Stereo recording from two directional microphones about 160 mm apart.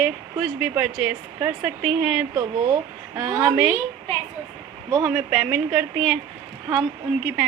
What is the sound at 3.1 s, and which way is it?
Speech, 25° right (ahead or behind).